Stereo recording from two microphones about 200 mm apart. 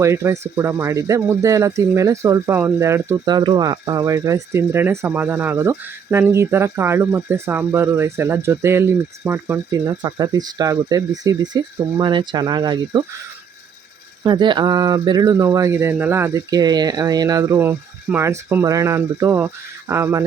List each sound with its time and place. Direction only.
0.0 s speech: 15° right (ahead or behind)
14.3 s speech: 20° right (ahead or behind)